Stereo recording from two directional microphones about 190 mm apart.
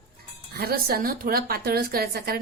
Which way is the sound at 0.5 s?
55° right (ahead or behind).